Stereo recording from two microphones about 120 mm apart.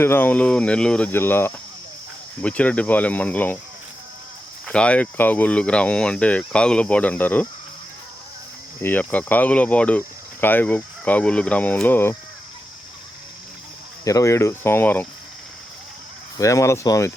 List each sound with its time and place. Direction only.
0.0 s speech: 15° left (ahead or behind)
4.6 s speech: 10° left (ahead or behind)
8.8 s speech: 15° left (ahead or behind)
14.0 s speech: 30° left (ahead or behind)
16.4 s speech: 25° left (ahead or behind)